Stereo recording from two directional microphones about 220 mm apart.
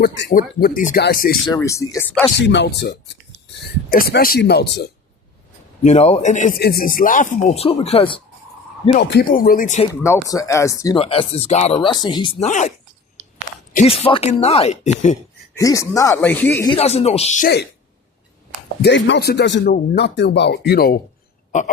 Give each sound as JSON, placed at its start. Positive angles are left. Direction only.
{"t": 0.0, "sound": "speech", "side_deg": 50}
{"t": 0.3, "sound": "speech", "side_deg": 40}
{"t": 1.5, "sound": "speech", "side_deg": 15}
{"t": 2.4, "sound": "speech", "side_deg": 55}
{"t": 5.8, "sound": "speech", "side_deg": 30}
{"t": 9.0, "sound": "speech", "side_deg": 45}
{"t": 10.2, "sound": "speech", "side_deg": 15}
{"t": 10.9, "sound": "speech", "side_deg": 25}
{"t": 12.4, "sound": "speech", "side_deg": 30}
{"t": 13.8, "sound": "speech", "side_deg": 25}
{"t": 15.5, "sound": "speech", "side_deg": 15}
{"t": 16.6, "sound": "speech", "side_deg": 25}
{"t": 18.8, "sound": "speech", "side_deg": 50}